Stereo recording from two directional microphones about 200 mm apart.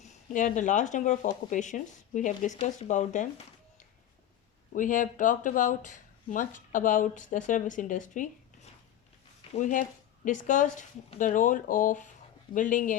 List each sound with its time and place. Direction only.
0.0 s speech: 40° left (ahead or behind)
4.7 s speech: 40° left (ahead or behind)
9.6 s speech: 40° left (ahead or behind)